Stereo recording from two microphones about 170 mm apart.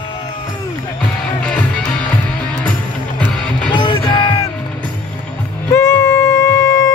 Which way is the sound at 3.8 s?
30° left (ahead or behind).